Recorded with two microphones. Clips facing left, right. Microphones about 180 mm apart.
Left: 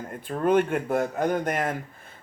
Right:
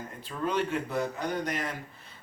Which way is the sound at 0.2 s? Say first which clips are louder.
Left 8 dB; 50° left (ahead or behind).